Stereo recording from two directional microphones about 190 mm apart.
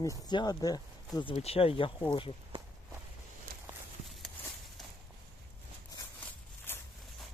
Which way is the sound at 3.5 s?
50° right (ahead or behind).